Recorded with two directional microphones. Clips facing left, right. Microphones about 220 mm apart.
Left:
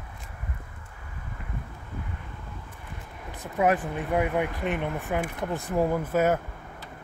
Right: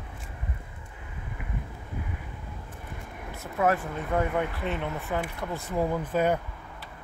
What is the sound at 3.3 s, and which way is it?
Speech, 15° left (ahead or behind).